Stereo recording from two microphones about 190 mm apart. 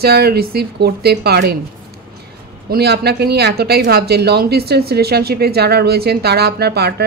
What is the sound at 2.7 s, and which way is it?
Speech, 55° right (ahead or behind).